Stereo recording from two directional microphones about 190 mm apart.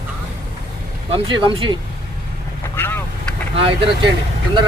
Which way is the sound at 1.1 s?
30° right (ahead or behind).